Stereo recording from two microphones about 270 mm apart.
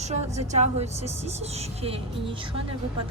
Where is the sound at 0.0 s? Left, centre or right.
Right.